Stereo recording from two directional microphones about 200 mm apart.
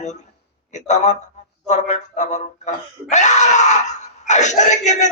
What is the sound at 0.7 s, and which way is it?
A man's voice, 35° left (ahead or behind).